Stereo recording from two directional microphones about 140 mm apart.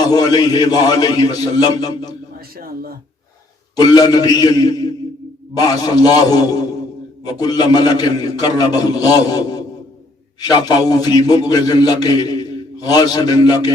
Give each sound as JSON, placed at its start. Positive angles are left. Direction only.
{"t": 0.1, "sound": "a man's voice", "side_deg": 30}
{"t": 3.8, "sound": "a man's voice", "side_deg": 30}